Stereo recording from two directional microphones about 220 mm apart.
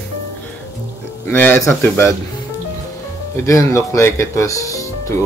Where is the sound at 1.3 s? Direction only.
10° left (ahead or behind).